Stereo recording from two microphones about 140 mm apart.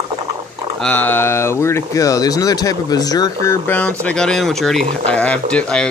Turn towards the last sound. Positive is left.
turn(degrees=5)  # may be behind; listen again after turning